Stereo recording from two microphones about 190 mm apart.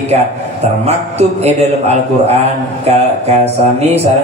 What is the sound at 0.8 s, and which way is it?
A man's voice, 35° right (ahead or behind).